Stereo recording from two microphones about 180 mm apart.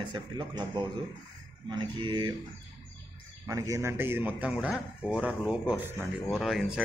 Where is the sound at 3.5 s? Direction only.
20° right (ahead or behind); by 6.6 s centre (ahead or behind).